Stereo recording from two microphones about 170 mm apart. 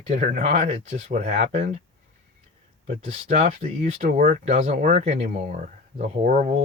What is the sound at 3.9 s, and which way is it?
Speech, 50° right (ahead or behind).